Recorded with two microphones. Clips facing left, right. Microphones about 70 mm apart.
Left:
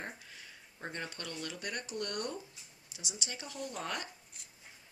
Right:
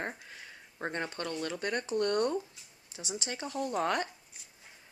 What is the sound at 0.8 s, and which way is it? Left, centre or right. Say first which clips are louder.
Speech: right 7 dB; right.